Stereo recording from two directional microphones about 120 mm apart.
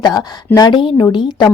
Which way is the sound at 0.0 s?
30° left (ahead or behind).